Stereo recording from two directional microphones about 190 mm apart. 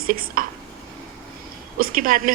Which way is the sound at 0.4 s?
45° right (ahead or behind).